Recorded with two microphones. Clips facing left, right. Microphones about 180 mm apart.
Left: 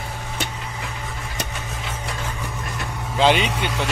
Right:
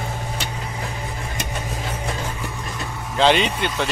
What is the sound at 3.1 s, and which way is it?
Vehicle, 10° left (ahead or behind).